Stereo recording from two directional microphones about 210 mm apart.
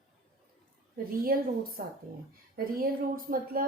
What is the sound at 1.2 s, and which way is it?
Speech, 45° right (ahead or behind).